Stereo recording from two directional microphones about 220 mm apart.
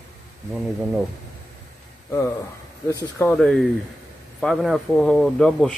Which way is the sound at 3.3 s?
5° left (ahead or behind).